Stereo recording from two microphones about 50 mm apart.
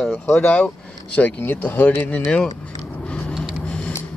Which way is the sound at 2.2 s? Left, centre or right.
Centre.